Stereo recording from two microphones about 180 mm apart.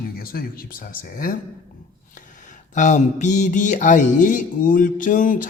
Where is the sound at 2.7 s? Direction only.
40° left (ahead or behind).